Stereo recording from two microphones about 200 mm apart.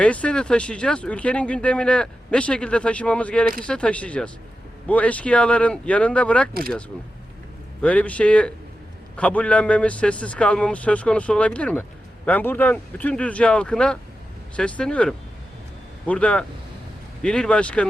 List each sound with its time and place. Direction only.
0.0 s speech: 5° left (ahead or behind)
6.5 s speech: 50° right (ahead or behind)
7.8 s a man's voice: 5° left (ahead or behind)